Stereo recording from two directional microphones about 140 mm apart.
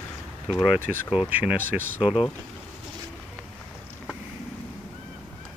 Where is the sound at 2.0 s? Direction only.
40° left (ahead or behind).